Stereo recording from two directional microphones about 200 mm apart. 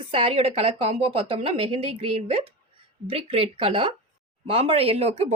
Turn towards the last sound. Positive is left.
turn(degrees=-30)  # may be behind; listen again after turning